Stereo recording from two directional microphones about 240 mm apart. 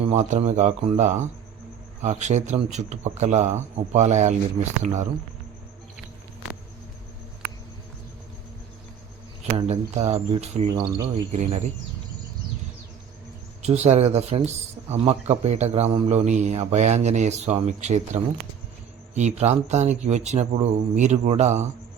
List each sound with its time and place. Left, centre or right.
0.0 s speech: right
9.6 s speech: right
13.6 s speech: right